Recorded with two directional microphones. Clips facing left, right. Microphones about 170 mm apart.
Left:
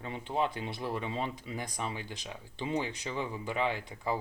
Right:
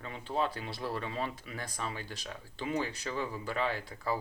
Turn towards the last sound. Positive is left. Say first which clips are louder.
# left 1 dB
turn(degrees=20)  # may be behind; listen again after turning